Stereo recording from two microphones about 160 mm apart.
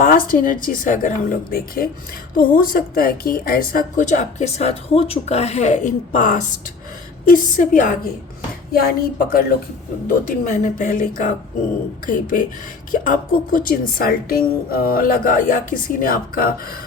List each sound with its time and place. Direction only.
0.0 s a woman's voice: 60° left (ahead or behind)
8.7 s a woman's voice: 70° left (ahead or behind)